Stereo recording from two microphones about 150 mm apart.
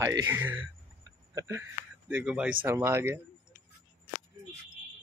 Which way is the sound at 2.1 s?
5° right (ahead or behind).